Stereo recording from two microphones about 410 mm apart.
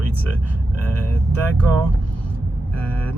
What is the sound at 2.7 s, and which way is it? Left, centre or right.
Speech, right.